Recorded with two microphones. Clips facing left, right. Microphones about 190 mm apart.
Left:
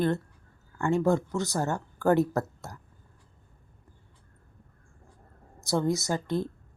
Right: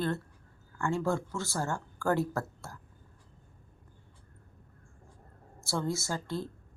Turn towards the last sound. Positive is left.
turn(degrees=20)  # may be behind; listen again after turning